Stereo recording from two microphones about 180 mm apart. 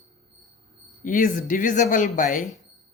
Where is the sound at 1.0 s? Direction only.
45° left (ahead or behind).